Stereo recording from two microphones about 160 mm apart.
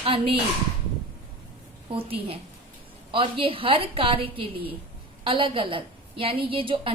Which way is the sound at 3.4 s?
35° right (ahead or behind).